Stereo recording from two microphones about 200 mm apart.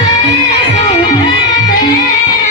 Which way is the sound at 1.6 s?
20° left (ahead or behind).